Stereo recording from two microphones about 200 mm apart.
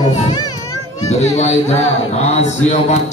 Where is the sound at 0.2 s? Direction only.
20° left (ahead or behind).